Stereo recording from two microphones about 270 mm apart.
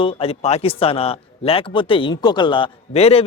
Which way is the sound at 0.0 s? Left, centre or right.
Left.